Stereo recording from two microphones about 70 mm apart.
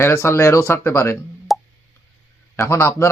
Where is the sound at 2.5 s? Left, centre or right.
Left.